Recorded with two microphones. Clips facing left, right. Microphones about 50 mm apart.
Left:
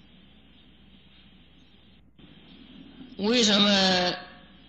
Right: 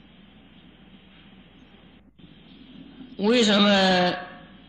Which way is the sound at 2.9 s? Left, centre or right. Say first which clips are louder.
Right 4 dB; centre.